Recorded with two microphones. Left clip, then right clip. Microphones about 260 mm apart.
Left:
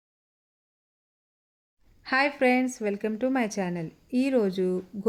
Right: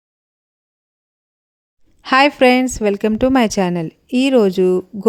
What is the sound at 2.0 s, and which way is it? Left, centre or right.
A woman's voice, right.